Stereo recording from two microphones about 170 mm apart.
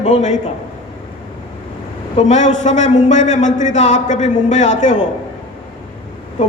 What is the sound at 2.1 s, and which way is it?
A man's voice, 45° left (ahead or behind).